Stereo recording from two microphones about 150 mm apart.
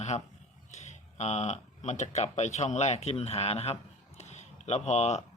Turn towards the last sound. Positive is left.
turn(degrees=50)  # may be behind; listen again after turning